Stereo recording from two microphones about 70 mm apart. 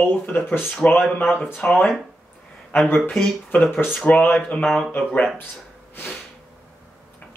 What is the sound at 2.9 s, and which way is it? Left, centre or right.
Speech, centre.